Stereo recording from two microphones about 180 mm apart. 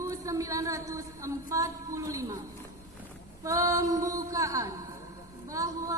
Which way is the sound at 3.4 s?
20° right (ahead or behind).